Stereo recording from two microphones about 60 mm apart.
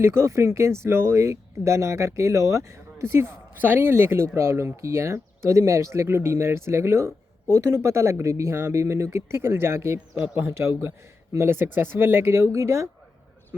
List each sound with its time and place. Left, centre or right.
0.0 s speech: right
13.5 s speech: right